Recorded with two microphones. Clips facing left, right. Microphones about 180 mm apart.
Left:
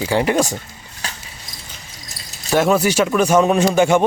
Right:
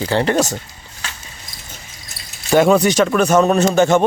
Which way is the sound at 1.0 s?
35° left (ahead or behind).